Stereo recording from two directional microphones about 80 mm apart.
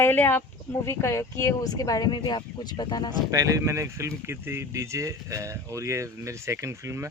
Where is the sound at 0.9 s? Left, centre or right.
Left.